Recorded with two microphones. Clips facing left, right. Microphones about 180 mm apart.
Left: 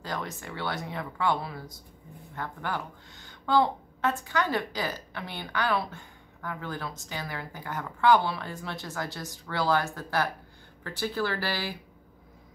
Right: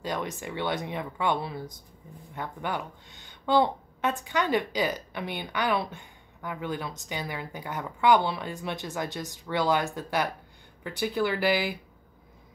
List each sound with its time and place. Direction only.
0.0 s a woman's voice: 20° right (ahead or behind)